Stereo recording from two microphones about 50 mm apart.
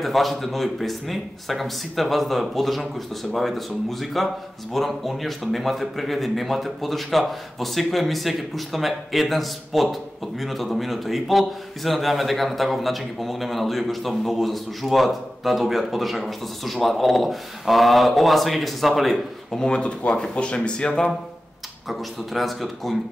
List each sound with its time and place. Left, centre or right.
0.0 s a man's voice: centre
19.6 s speech: centre
21.8 s a man's voice: centre